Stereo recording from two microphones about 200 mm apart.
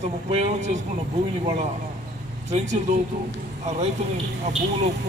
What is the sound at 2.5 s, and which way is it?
A man's voice, 35° right (ahead or behind).